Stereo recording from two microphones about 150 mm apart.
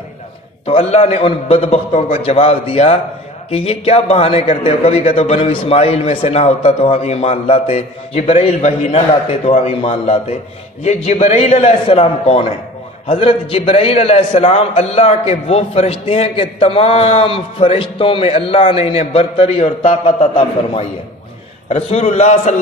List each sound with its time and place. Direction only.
0.7 s a man's voice: 45° left (ahead or behind)